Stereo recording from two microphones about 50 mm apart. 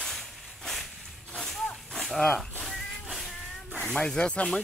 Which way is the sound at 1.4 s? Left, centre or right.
Centre.